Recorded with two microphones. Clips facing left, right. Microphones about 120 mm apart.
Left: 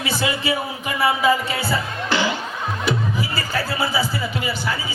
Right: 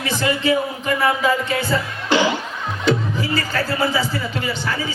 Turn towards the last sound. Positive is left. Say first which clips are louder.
# right 1 dB
turn(degrees=10)  # may be behind; listen again after turning